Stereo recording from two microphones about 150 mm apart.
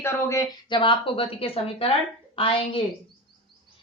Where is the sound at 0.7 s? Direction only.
35° left (ahead or behind).